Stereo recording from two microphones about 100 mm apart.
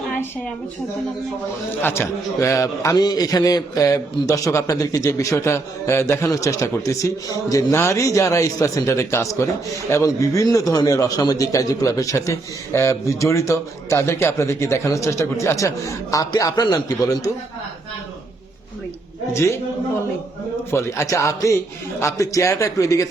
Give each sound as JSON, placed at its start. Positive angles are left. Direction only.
{"t": 1.8, "sound": "a man's voice", "side_deg": 25}
{"t": 19.3, "sound": "a man's voice", "side_deg": 25}
{"t": 20.7, "sound": "a man's voice", "side_deg": 30}